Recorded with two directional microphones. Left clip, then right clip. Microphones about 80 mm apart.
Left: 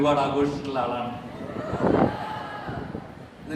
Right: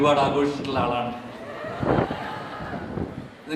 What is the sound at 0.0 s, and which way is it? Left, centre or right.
Speech, right.